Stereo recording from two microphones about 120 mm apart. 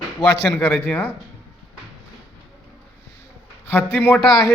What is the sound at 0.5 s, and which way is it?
Speech, 15° left (ahead or behind).